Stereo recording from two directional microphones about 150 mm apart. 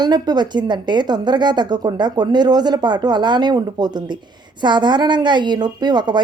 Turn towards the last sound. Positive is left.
turn(degrees=-30)  # may be behind; listen again after turning